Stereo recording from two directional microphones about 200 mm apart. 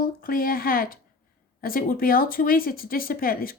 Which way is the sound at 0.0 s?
45° left (ahead or behind).